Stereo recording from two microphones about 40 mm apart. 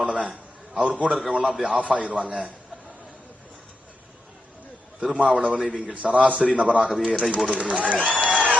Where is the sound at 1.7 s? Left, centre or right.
Right.